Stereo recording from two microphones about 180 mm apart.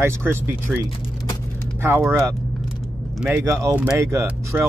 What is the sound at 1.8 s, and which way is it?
Speech, 10° right (ahead or behind).